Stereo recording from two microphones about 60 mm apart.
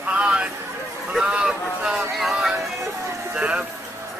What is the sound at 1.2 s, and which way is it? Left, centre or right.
Vehicle, centre.